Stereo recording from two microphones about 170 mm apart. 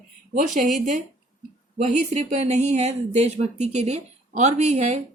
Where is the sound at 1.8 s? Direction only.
40° right (ahead or behind).